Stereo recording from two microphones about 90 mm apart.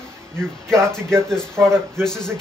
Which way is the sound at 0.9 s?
5° left (ahead or behind).